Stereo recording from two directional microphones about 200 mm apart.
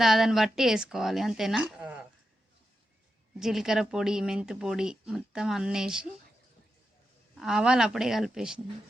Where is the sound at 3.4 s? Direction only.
Centre (ahead or behind).